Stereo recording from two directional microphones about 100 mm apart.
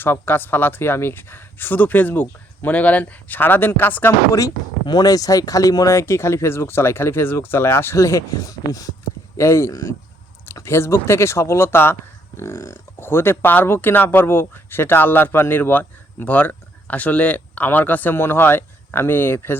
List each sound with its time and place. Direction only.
0.0 s speech: 20° left (ahead or behind)
4.3 s speech: 35° left (ahead or behind)